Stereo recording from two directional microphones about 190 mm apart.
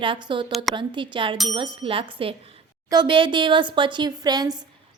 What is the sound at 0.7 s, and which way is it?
A woman's voice, 25° right (ahead or behind).